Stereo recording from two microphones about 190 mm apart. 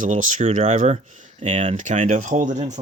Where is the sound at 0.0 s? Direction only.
40° right (ahead or behind).